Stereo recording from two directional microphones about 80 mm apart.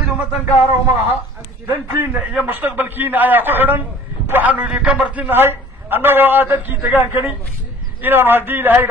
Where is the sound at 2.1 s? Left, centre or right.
Right.